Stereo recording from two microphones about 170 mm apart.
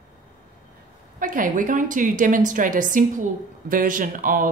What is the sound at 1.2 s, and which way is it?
Speech, 50° right (ahead or behind).